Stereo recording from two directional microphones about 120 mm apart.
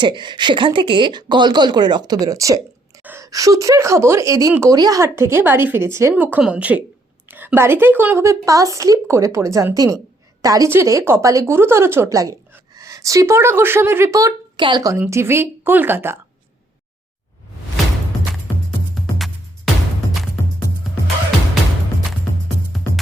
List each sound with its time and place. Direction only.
0.0 s speech: 40° right (ahead or behind)
3.0 s a sound: 15° right (ahead or behind)
3.2 s speech: 30° right (ahead or behind)
6.3 s a woman's voice: 10° right (ahead or behind); by 14.9 s 35° right (ahead or behind)
14.9 s speech: 20° right (ahead or behind)
22.7 s music: centre (ahead or behind)